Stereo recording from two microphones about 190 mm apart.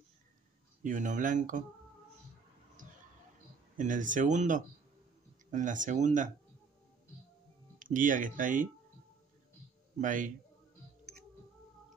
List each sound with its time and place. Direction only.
0.8 s speech: 40° right (ahead or behind)
2.8 s a sound: 45° right (ahead or behind)
3.7 s speech: 45° right (ahead or behind)
7.8 s speech: 45° right (ahead or behind)
9.9 s speech: 45° right (ahead or behind)